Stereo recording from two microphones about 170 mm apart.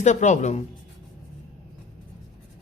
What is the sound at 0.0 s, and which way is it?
Speech, 45° left (ahead or behind).